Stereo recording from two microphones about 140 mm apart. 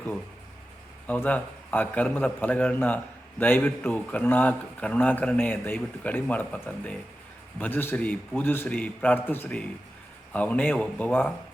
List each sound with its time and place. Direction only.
1.0 s a man's voice: 10° left (ahead or behind)